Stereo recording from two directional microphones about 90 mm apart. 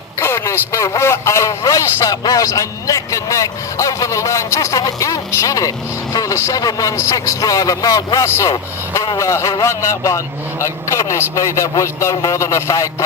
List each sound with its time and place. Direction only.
0.2 s a man's voice: 30° left (ahead or behind)